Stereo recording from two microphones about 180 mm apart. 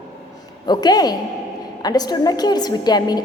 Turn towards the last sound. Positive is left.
turn(degrees=20)  # may be behind; listen again after turning